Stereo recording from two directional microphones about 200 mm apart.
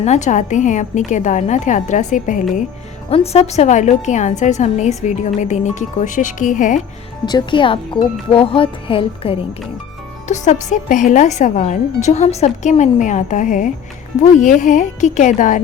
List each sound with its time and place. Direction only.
0.0 s a woman's voice: 35° left (ahead or behind)
7.3 s a woman's voice: 20° left (ahead or behind); by 15.6 s 40° left (ahead or behind)